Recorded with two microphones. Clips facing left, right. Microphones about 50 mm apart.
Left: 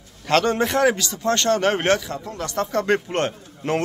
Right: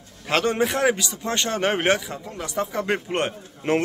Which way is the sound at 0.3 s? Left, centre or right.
Centre.